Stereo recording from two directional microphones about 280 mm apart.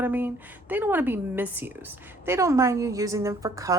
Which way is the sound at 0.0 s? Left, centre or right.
Centre.